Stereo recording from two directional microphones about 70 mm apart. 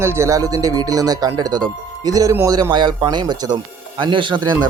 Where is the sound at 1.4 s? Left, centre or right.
Right.